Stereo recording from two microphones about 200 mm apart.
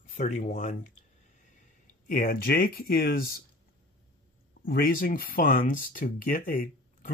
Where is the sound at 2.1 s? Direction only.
45° left (ahead or behind).